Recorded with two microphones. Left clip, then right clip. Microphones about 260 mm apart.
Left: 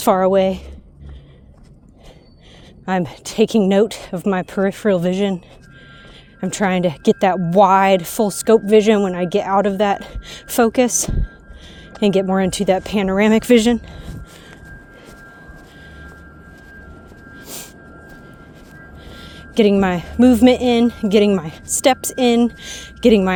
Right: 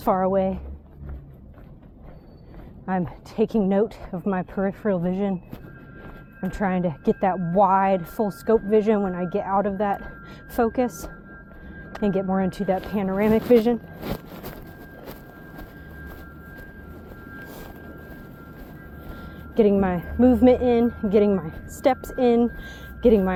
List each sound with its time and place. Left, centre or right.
0.0 s speech: left
2.8 s speech: left
6.4 s speech: left
19.5 s speech: left